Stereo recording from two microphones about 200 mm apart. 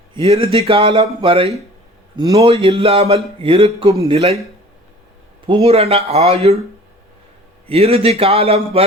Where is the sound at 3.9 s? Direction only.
15° right (ahead or behind).